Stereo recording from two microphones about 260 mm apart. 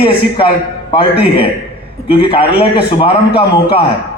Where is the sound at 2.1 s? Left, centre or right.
Centre.